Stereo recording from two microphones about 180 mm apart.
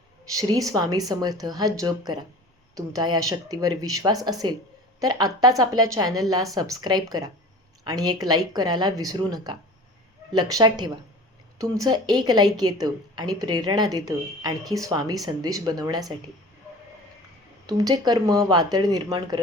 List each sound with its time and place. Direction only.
0.3 s a woman's voice: 20° right (ahead or behind)
17.7 s a woman's voice: 20° right (ahead or behind)